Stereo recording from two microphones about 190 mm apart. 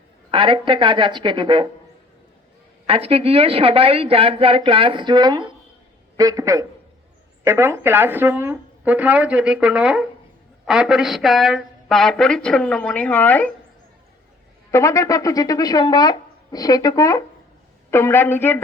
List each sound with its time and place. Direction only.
0.3 s a woman's voice: 25° right (ahead or behind)
2.8 s a woman's voice: 30° right (ahead or behind); by 13.5 s 10° left (ahead or behind)
14.7 s a woman's voice: 15° left (ahead or behind)